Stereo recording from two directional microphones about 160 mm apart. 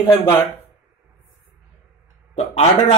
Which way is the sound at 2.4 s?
40° left (ahead or behind).